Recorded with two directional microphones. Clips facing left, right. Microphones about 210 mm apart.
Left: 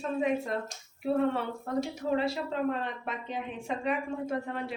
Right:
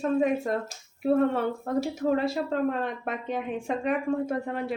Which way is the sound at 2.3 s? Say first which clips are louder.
Right 4 dB; 50° right (ahead or behind).